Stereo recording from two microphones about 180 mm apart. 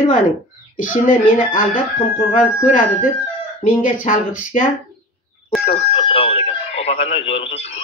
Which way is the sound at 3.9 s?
45° left (ahead or behind).